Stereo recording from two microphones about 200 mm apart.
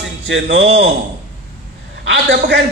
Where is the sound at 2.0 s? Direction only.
65° right (ahead or behind).